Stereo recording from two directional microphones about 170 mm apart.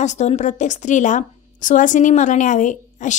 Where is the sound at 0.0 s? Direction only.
45° left (ahead or behind).